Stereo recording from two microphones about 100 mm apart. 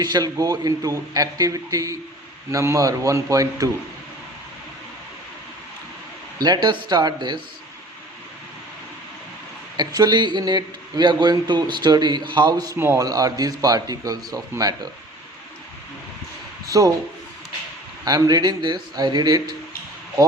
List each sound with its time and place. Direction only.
0.0 s speech: 40° right (ahead or behind)
6.4 s speech: 45° right (ahead or behind)
9.7 s speech: 45° right (ahead or behind)
12.7 s a man's voice: 25° right (ahead or behind)
13.0 s speech: 35° right (ahead or behind)
16.7 s speech: 40° right (ahead or behind)
18.0 s speech: 40° right (ahead or behind)